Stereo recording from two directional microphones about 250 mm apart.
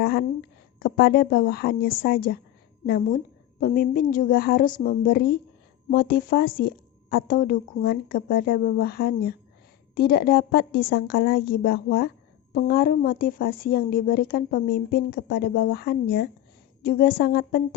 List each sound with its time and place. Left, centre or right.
0.0 s a woman's voice: left